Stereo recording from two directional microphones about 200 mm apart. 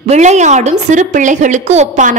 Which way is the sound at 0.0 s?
35° right (ahead or behind).